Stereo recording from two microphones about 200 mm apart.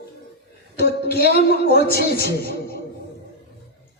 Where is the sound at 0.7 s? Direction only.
50° left (ahead or behind).